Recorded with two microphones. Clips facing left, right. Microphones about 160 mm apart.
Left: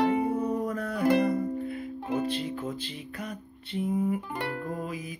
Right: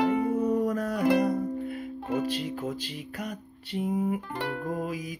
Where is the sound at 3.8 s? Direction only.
55° right (ahead or behind).